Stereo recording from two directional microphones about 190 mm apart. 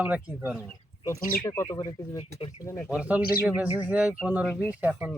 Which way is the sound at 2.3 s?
30° left (ahead or behind).